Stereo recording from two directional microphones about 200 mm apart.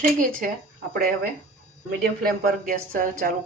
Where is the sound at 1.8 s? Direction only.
45° right (ahead or behind).